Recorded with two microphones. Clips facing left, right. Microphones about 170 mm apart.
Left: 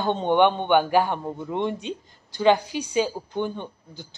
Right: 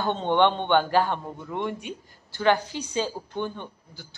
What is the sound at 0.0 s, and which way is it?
A man's voice, 15° left (ahead or behind).